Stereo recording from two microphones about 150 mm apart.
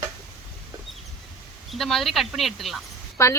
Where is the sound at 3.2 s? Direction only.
20° left (ahead or behind).